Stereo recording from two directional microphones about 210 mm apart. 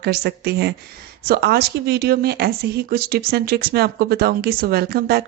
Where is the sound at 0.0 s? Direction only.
50° right (ahead or behind).